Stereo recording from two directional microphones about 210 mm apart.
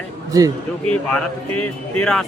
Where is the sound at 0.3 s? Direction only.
15° right (ahead or behind).